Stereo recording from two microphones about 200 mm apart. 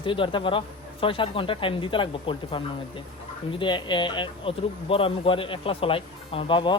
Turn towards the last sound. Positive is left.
turn(degrees=25)  # may be behind; listen again after turning